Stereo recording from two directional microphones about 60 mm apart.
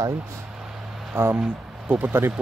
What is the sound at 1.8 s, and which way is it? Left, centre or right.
Speech, right.